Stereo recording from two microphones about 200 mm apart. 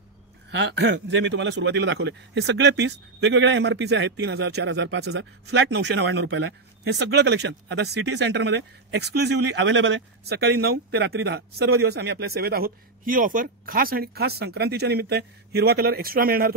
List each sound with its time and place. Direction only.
0.5 s speech: 60° right (ahead or behind)